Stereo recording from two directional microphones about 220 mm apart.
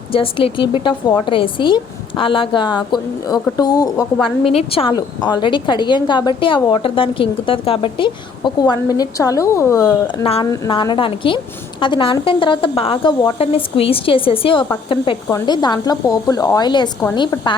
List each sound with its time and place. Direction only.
0.1 s a woman's voice: 25° left (ahead or behind)